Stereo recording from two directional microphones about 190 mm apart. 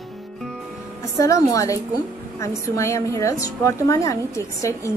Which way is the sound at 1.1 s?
15° left (ahead or behind).